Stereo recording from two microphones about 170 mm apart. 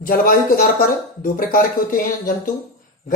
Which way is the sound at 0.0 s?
60° left (ahead or behind).